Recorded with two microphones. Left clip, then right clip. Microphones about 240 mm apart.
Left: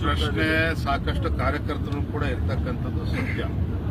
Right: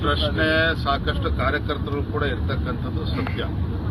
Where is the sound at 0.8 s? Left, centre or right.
Centre.